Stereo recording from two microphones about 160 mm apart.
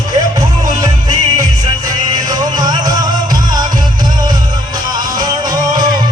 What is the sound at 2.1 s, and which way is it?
Music, 25° right (ahead or behind).